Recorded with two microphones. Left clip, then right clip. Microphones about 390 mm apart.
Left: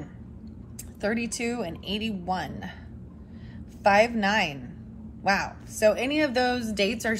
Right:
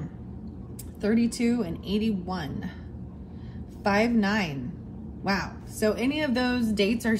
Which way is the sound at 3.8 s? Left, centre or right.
Left.